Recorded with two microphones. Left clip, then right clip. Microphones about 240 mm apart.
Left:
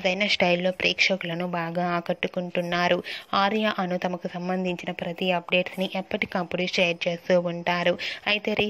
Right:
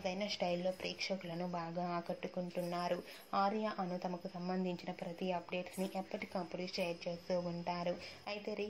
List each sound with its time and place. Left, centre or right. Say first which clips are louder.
0.0 s speech: left 16 dB; left